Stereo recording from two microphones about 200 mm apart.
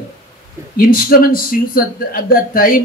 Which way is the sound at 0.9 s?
45° left (ahead or behind).